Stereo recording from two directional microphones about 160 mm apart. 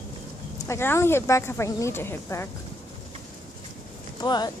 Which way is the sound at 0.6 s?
15° left (ahead or behind).